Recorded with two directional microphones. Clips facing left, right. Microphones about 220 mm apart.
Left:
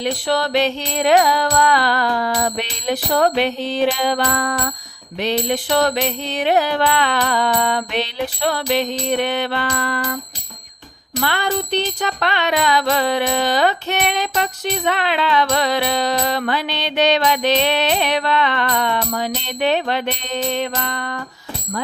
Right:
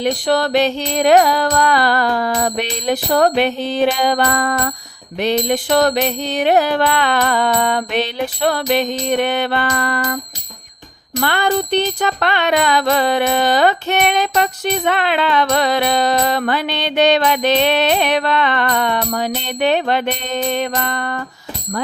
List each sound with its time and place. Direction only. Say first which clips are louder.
0.0 s music: right 3 dB; 50° right (ahead or behind)
11.2 s music: right 4 dB; 50° right (ahead or behind)